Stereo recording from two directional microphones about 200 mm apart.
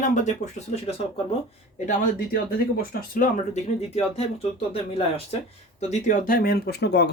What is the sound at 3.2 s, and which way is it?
Speech, 35° left (ahead or behind).